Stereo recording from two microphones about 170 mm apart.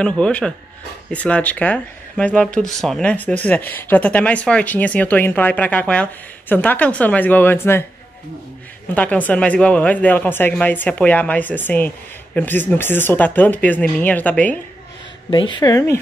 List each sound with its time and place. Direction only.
0.0 s speech: 5° left (ahead or behind)
8.9 s speech: 10° left (ahead or behind)
15.3 s speech: 30° left (ahead or behind)